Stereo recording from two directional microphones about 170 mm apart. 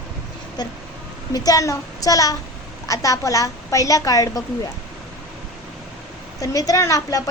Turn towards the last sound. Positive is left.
turn(degrees=20)  # may be behind; listen again after turning